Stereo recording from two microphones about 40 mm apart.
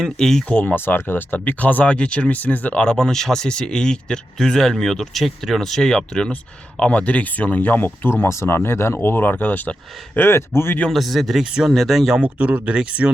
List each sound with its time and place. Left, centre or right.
0.0 s speech: centre
0.8 s speech: left
1.5 s speech: left
2.8 s speech: centre
5.2 s speech: centre
6.9 s speech: left
8.2 s speech: left
10.2 s speech: left
10.9 s speech: centre
12.2 s speech: right